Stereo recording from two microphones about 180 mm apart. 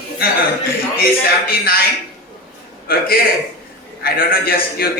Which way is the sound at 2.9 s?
55° left (ahead or behind).